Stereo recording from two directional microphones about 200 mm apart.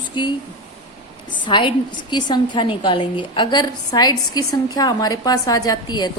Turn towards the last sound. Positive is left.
turn(degrees=20)  # may be behind; listen again after turning